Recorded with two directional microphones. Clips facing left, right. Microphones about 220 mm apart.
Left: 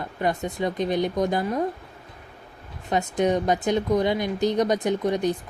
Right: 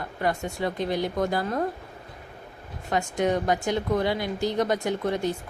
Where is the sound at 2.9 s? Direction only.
20° left (ahead or behind).